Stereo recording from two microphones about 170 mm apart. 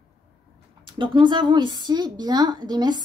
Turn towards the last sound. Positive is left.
turn(degrees=-25)  # may be behind; listen again after turning